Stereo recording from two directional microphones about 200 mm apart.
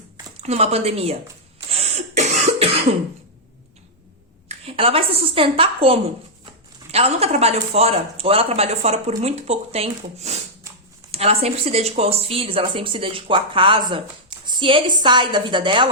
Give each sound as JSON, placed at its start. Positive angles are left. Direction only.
{"t": 0.4, "sound": "speech", "side_deg": -30}
{"t": 1.6, "sound": "cough", "side_deg": -30}
{"t": 4.4, "sound": "a woman's voice", "side_deg": -30}